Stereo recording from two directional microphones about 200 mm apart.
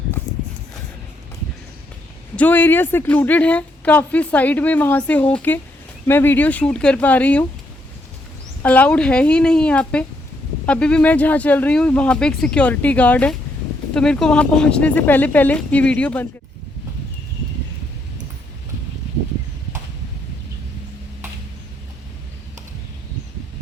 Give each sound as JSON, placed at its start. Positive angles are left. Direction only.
{"t": 2.3, "sound": "a woman's voice", "side_deg": 10}
{"t": 8.6, "sound": "a woman's voice", "side_deg": 5}